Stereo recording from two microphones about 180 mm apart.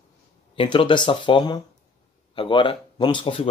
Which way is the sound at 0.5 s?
30° left (ahead or behind).